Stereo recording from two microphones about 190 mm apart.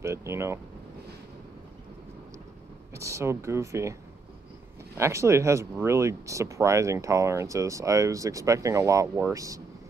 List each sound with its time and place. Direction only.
0.0 s speech: 15° right (ahead or behind)
2.9 s speech: 15° right (ahead or behind)
4.9 s speech: 15° right (ahead or behind)